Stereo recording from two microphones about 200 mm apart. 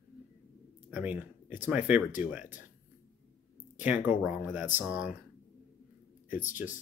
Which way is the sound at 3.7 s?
10° right (ahead or behind).